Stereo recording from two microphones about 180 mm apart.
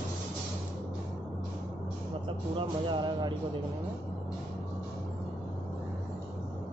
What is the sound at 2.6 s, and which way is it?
Speech, 25° right (ahead or behind).